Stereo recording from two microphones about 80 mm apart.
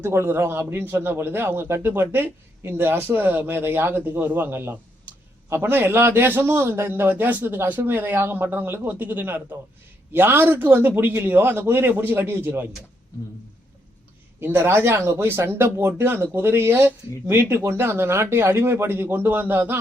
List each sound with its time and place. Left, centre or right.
0.0 s a man's voice: right
14.4 s a man's voice: right